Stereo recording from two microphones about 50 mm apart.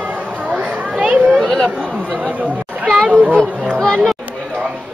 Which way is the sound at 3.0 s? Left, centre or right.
Right.